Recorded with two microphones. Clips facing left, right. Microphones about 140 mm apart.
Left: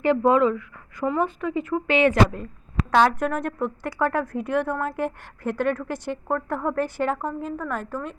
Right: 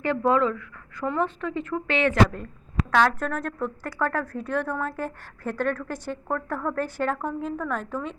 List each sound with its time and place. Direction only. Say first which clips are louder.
0.0 s a woman's voice: left 4 dB; 15° left (ahead or behind)